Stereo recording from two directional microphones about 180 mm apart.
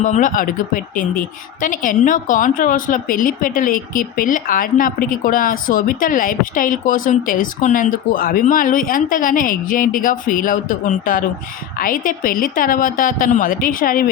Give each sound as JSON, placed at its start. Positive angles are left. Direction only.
{"t": 0.0, "sound": "a woman's voice", "side_deg": 45}